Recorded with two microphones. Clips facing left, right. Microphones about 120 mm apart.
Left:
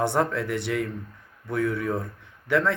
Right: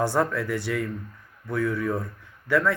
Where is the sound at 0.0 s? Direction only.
25° left (ahead or behind).